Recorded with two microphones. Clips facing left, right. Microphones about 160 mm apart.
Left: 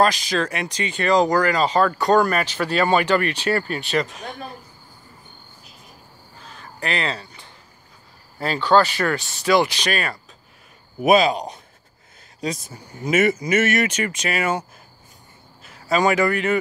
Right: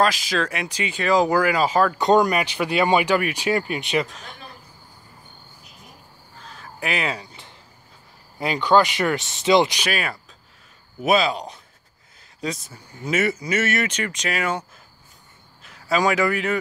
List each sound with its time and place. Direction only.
0.0 s speech: centre (ahead or behind)
2.0 s speech: 20° right (ahead or behind)
6.4 s a sound: centre (ahead or behind)
8.4 s speech: 15° right (ahead or behind)
9.8 s speech: 5° right (ahead or behind)
11.3 s speech: 20° left (ahead or behind)
13.0 s speech: 15° left (ahead or behind)
13.3 s speech: 45° left (ahead or behind)
13.7 s speech: 10° left (ahead or behind)
15.6 s a man's voice: centre (ahead or behind)